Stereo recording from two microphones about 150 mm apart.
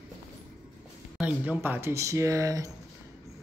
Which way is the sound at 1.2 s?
10° right (ahead or behind).